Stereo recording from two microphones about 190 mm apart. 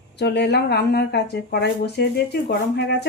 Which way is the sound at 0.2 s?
60° left (ahead or behind).